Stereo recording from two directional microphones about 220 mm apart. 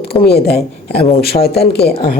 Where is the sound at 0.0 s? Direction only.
45° left (ahead or behind).